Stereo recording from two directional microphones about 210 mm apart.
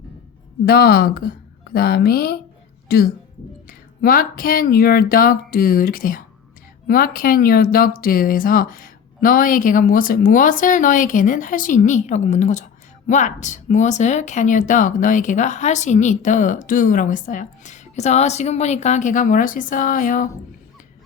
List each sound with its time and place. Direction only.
0.6 s speech: 45° left (ahead or behind)